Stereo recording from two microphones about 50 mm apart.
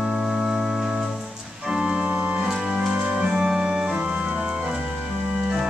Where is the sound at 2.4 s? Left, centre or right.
Centre.